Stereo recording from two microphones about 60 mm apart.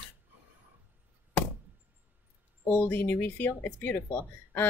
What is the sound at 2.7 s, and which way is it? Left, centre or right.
A woman's voice, left.